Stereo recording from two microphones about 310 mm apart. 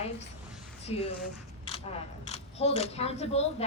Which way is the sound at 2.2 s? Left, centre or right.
Left.